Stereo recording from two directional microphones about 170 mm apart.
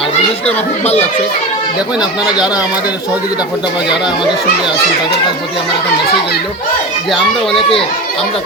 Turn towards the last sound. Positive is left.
turn(degrees=0)  # may be behind; listen again after turning